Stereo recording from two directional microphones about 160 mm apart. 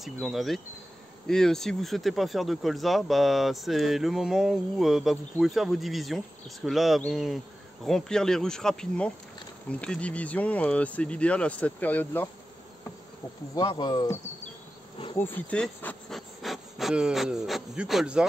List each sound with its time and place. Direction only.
0.0 s speech: centre (ahead or behind)
13.6 s speech: 25° left (ahead or behind)
15.1 s speech: 10° left (ahead or behind); by 18.2 s 5° right (ahead or behind)